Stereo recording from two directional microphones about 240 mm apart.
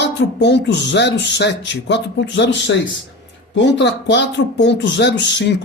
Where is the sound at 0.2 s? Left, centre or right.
Left.